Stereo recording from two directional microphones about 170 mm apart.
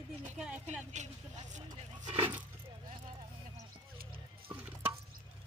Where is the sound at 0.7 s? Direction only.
45° right (ahead or behind).